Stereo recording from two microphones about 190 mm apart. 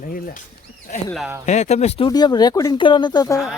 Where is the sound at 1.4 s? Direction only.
35° left (ahead or behind); by 3.4 s 20° left (ahead or behind).